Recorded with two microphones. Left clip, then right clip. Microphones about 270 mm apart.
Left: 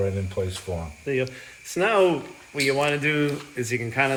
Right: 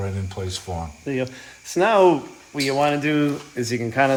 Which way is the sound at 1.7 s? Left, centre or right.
Right.